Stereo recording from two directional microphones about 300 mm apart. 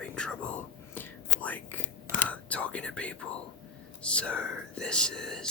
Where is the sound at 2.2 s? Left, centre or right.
Centre.